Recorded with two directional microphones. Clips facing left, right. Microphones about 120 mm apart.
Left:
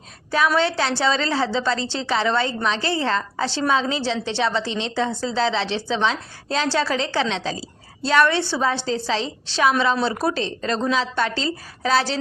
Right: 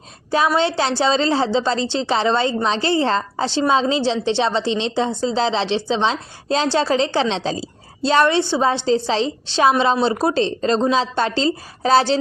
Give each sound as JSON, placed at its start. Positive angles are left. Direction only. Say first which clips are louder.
{"t": 0.3, "sound": "a woman's voice", "louder": "right 2 dB", "side_deg": -25}